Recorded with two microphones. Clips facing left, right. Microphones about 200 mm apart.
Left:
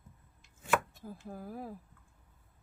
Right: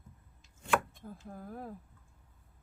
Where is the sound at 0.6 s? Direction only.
5° left (ahead or behind).